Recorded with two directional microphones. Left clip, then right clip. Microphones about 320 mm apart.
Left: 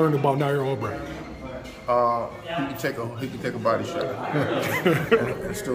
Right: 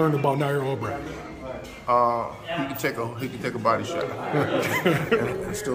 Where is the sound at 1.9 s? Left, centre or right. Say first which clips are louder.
Right 1 dB; centre.